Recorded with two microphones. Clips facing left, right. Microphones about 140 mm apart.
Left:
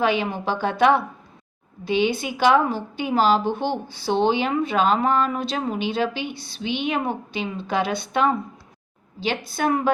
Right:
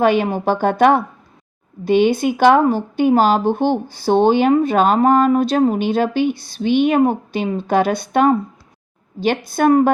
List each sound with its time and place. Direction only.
0.0 s speech: 45° right (ahead or behind)